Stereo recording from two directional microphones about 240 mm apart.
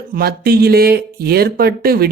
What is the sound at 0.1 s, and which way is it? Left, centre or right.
Speech, right.